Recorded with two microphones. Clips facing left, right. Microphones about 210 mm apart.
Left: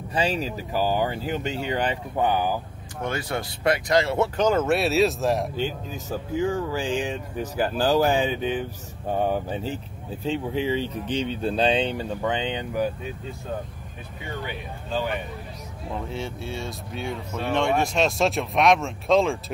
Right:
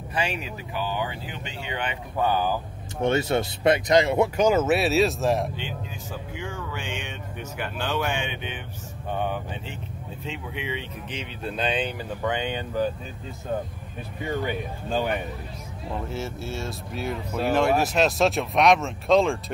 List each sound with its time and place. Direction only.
0.1 s speech: 35° left (ahead or behind)
2.1 s speech: 15° left (ahead or behind)
3.0 s speech: 25° right (ahead or behind); by 5.5 s centre (ahead or behind)
5.6 s speech: 40° left (ahead or behind); by 12.9 s 15° left (ahead or behind)
14.2 s speech: 45° right (ahead or behind)
15.9 s speech: 5° right (ahead or behind)